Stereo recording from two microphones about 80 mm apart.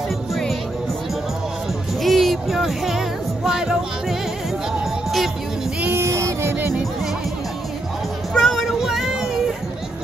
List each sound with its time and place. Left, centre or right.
0.3 s music: centre
2.0 s music: centre
5.9 s child singing: right
8.3 s music: centre
8.7 s child singing: centre